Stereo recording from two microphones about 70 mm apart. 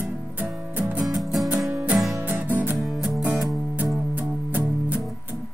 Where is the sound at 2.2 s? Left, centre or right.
Right.